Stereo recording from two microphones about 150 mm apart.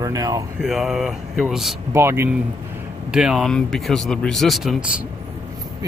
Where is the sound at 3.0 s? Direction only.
5° right (ahead or behind).